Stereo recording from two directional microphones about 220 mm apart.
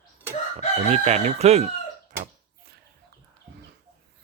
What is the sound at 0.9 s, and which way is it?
Speech, 30° right (ahead or behind).